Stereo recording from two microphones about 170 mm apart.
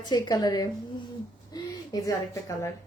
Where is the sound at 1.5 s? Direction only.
25° left (ahead or behind).